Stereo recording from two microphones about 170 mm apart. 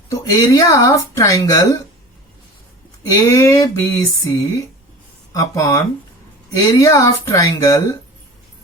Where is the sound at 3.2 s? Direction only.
20° left (ahead or behind).